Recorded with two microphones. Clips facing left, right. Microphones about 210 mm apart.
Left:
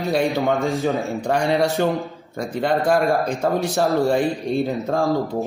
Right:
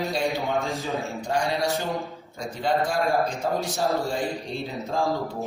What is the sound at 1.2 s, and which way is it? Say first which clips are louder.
A man's voice: left 6 dB; 65° left (ahead or behind).